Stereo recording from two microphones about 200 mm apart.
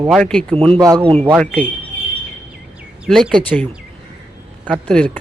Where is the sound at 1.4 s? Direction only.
5° left (ahead or behind).